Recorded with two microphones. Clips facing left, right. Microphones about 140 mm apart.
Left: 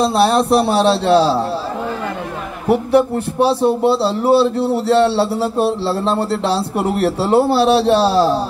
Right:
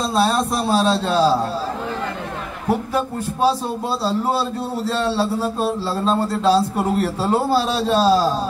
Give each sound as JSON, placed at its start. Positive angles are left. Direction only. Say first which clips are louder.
{"t": 0.0, "sound": "a man's voice", "louder": "left 5 dB", "side_deg": 70}
{"t": 2.7, "sound": "a man's voice", "louder": "left 8 dB", "side_deg": 70}